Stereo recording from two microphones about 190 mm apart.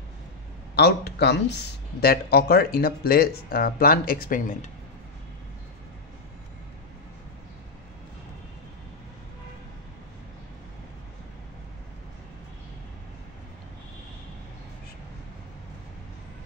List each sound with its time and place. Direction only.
0.7 s speech: 60° left (ahead or behind); by 4.6 s 40° left (ahead or behind)